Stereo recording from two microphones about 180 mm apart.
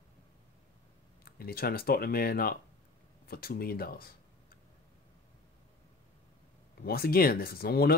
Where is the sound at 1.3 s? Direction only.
55° left (ahead or behind).